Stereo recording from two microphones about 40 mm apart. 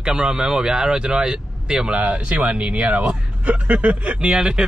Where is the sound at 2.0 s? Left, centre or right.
Right.